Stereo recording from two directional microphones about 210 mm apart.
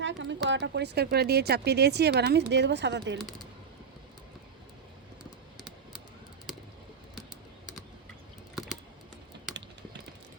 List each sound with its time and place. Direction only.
0.0 s speech: 60° right (ahead or behind)
3.2 s speech: centre (ahead or behind)
8.5 s a sound: centre (ahead or behind)